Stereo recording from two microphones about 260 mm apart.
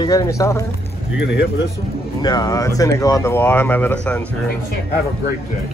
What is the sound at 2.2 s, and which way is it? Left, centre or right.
Speech, centre.